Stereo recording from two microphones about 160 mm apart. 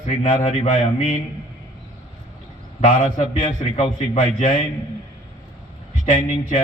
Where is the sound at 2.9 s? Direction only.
55° left (ahead or behind).